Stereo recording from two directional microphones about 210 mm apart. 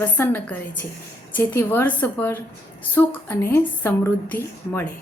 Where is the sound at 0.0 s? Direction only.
10° left (ahead or behind).